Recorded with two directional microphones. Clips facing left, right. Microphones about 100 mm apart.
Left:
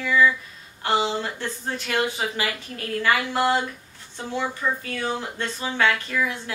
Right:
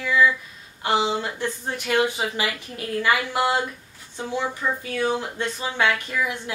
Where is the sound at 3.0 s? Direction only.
15° right (ahead or behind).